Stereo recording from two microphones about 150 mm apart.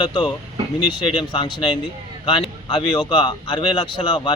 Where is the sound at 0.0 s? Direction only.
30° left (ahead or behind).